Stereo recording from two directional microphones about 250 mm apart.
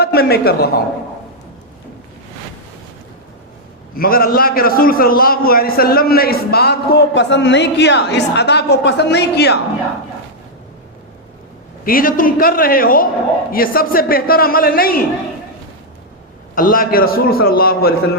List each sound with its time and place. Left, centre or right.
0.0 s a man's voice: left
3.9 s a man's voice: left
11.9 s a man's voice: left
16.6 s a man's voice: left